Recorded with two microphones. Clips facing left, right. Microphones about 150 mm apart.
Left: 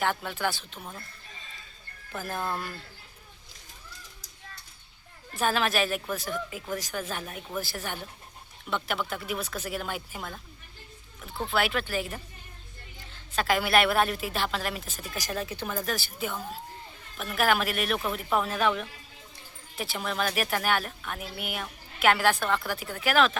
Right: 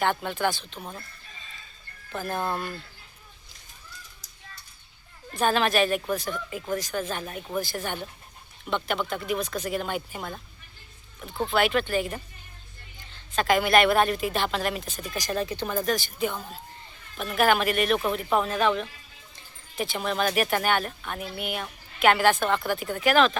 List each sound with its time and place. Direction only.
0.0 s a woman's voice: 5° left (ahead or behind)
0.8 s speech: 20° right (ahead or behind)
2.1 s a woman's voice: 5° left (ahead or behind)
5.4 s a woman's voice: 5° left (ahead or behind)
11.4 s a woman's voice: 5° left (ahead or behind)
13.3 s a woman's voice: 5° left (ahead or behind)